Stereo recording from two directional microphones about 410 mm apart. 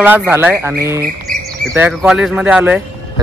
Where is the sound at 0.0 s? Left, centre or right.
Centre.